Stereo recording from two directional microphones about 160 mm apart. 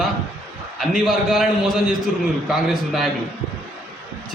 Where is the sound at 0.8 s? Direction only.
Centre (ahead or behind).